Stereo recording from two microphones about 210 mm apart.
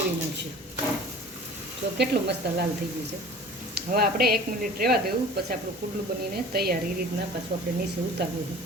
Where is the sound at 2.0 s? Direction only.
50° right (ahead or behind).